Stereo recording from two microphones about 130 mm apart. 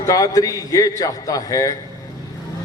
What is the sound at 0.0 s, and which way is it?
Speech, 25° left (ahead or behind).